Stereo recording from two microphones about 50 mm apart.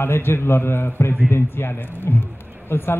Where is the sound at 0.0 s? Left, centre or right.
Left.